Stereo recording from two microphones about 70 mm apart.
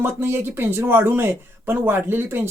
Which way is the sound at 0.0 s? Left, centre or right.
Right.